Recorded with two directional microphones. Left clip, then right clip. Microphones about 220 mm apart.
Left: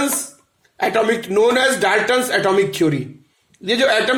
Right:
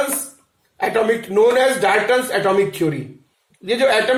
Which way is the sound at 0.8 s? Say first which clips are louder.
Left 1 dB; 50° left (ahead or behind).